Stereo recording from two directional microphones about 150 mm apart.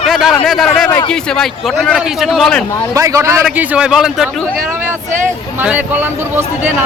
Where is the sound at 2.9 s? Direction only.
20° right (ahead or behind).